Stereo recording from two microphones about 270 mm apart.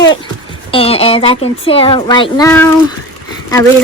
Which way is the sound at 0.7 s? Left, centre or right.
Left.